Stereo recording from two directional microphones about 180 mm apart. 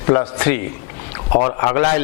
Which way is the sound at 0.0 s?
20° left (ahead or behind).